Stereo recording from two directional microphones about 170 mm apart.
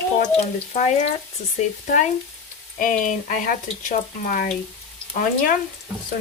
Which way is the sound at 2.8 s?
50° left (ahead or behind).